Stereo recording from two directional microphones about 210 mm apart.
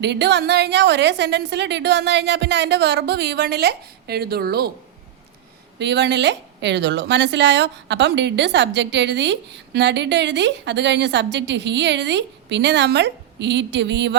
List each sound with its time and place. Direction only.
0.0 s a woman's voice: 55° right (ahead or behind)
5.8 s a woman's voice: 55° right (ahead or behind)